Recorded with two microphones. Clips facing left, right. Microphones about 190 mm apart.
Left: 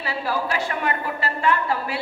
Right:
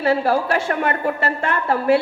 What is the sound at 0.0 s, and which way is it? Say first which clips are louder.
A man's voice: right 8 dB; 50° right (ahead or behind).